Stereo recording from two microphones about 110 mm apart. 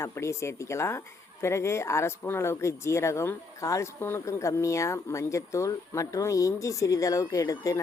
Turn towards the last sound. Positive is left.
turn(degrees=30)  # may be behind; listen again after turning